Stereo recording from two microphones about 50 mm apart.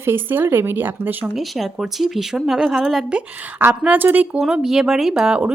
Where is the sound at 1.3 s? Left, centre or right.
Centre.